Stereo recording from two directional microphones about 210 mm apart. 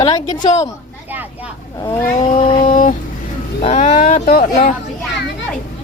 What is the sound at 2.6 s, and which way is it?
Speech, 40° left (ahead or behind).